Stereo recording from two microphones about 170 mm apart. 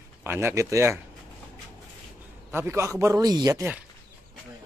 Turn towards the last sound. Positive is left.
turn(degrees=-15)  # may be behind; listen again after turning